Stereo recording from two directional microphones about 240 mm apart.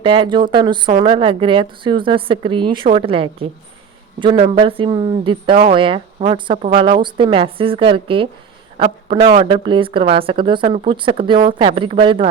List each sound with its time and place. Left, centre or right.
0.0 s speech: right